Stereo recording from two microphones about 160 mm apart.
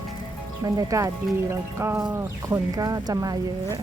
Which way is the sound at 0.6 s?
20° right (ahead or behind).